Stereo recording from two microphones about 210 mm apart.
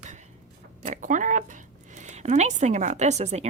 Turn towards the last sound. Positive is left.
turn(degrees=-30)  # may be behind; listen again after turning